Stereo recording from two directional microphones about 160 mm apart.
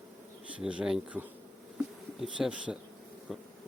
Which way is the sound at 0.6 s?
5° right (ahead or behind).